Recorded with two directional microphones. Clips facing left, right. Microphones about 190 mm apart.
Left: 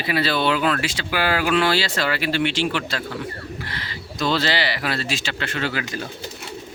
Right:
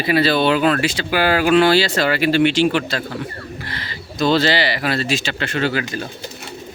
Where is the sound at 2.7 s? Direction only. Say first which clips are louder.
Right 5 dB; 40° right (ahead or behind).